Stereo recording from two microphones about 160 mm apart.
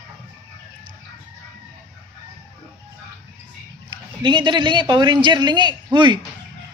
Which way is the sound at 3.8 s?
30° right (ahead or behind).